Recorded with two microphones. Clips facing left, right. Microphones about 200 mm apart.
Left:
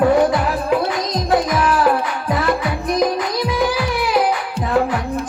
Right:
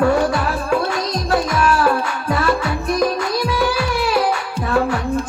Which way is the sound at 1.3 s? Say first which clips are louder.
Left 1 dB; 20° left (ahead or behind).